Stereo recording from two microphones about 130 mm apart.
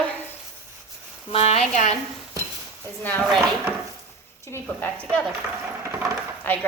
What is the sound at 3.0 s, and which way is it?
Speech, 10° left (ahead or behind).